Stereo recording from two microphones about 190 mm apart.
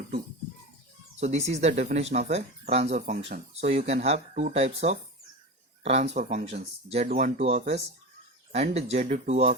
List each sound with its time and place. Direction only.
1.2 s speech: 35° right (ahead or behind)